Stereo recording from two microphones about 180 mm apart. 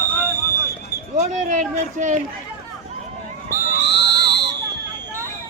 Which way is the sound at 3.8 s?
75° left (ahead or behind).